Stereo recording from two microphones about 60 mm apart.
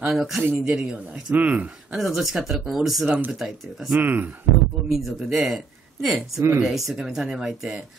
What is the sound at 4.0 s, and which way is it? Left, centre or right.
Speech, right.